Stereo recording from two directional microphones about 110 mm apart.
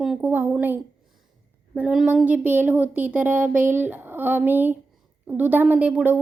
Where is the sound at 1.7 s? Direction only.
5° right (ahead or behind).